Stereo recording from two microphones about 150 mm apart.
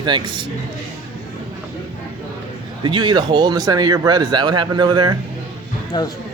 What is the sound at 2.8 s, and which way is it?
Speech, 30° right (ahead or behind).